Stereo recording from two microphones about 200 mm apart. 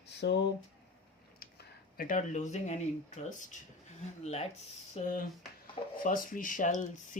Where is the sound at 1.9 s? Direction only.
40° left (ahead or behind).